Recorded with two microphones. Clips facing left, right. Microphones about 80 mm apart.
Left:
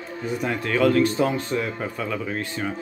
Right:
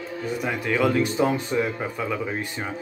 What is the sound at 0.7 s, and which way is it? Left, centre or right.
Speech, centre.